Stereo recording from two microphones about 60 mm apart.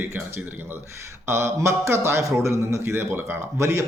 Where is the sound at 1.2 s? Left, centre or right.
Right.